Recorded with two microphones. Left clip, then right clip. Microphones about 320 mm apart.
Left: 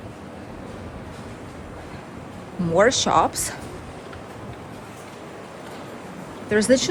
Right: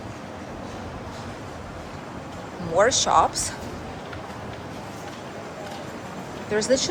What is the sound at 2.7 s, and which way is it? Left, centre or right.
Speech, left.